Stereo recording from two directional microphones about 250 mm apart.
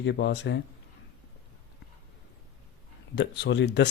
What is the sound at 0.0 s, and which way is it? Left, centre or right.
Speech, left.